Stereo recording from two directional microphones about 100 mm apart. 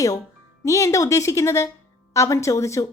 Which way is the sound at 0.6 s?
30° left (ahead or behind).